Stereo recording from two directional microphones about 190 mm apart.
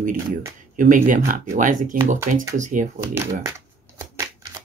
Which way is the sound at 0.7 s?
45° right (ahead or behind).